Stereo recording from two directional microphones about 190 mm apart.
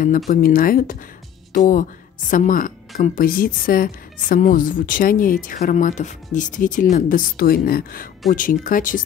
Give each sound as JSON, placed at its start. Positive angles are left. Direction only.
{"t": 0.3, "sound": "a woman's voice", "side_deg": 50}